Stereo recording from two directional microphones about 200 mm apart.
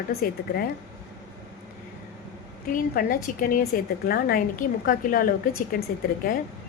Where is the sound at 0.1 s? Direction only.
50° left (ahead or behind).